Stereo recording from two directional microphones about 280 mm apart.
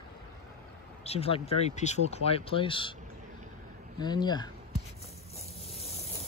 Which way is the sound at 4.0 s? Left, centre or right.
Centre.